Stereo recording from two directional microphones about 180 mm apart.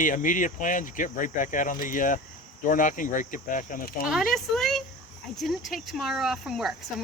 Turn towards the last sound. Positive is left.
turn(degrees=0)  # may be behind; listen again after turning